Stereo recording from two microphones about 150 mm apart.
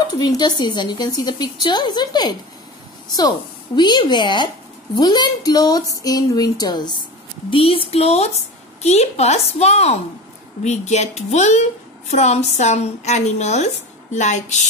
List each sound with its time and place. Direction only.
0.2 s a woman's voice: 30° left (ahead or behind); by 14.6 s 50° left (ahead or behind)